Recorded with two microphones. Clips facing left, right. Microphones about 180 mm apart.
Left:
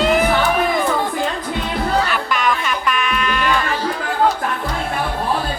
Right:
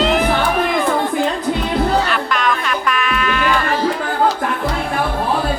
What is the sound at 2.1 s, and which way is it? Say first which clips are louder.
Music: right 1 dB; centre (ahead or behind).